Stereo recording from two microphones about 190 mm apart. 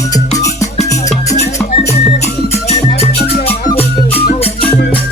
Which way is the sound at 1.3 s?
35° left (ahead or behind).